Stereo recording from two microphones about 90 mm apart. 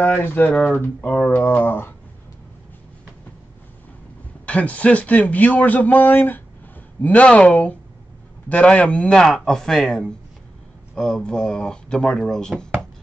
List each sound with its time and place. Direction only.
0.0 s speech: 25° left (ahead or behind)
0.5 s speech: 10° left (ahead or behind)
4.5 s speech: 15° left (ahead or behind)